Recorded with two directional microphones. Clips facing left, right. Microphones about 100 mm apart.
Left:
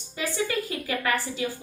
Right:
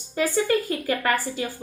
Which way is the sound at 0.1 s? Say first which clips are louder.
Right 6 dB; 45° right (ahead or behind).